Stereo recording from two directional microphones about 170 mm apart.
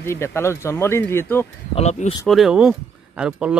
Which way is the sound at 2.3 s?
5° right (ahead or behind).